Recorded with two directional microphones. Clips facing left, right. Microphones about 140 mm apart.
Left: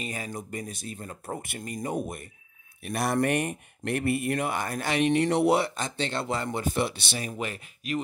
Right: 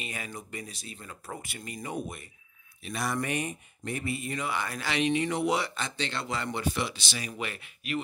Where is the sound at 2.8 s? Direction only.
60° left (ahead or behind).